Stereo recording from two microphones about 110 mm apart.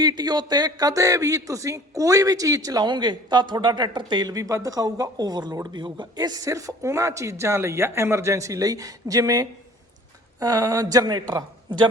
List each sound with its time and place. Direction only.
0.0 s speech: 40° right (ahead or behind)